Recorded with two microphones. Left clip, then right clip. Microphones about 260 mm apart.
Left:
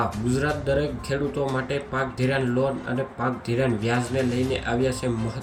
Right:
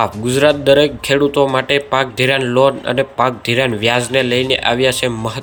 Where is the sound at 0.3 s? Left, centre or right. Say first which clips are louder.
Right 16 dB; centre.